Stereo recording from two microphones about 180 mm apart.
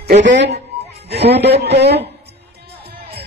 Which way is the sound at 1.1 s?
70° right (ahead or behind).